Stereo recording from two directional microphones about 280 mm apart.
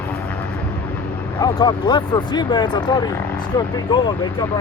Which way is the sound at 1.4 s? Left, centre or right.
Centre.